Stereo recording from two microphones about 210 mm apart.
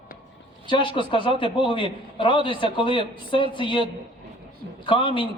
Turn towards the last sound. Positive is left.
turn(degrees=25)  # may be behind; listen again after turning